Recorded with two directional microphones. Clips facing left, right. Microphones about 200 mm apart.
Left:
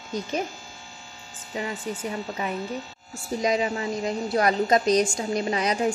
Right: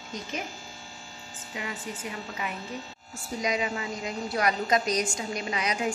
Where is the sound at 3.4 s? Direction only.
35° left (ahead or behind).